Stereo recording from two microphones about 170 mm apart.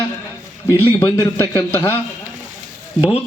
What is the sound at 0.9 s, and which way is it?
A man's voice, 15° left (ahead or behind).